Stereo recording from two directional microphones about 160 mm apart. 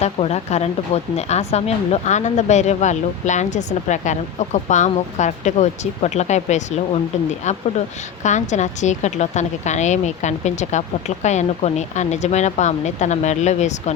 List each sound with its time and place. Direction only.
0.0 s a woman's voice: 40° left (ahead or behind)